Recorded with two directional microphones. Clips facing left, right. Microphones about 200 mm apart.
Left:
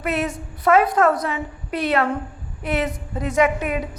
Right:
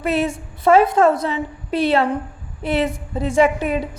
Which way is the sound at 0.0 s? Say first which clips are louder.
Right 4 dB; 30° right (ahead or behind).